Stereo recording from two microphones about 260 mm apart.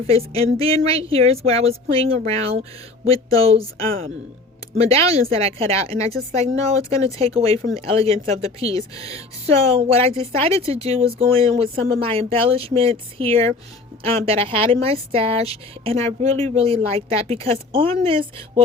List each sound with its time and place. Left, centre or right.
0.1 s a woman's voice: right
4.7 s a woman's voice: right